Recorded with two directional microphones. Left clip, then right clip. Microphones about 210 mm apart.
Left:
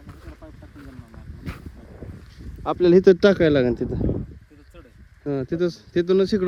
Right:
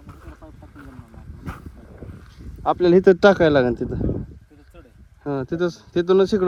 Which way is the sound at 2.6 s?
25° left (ahead or behind).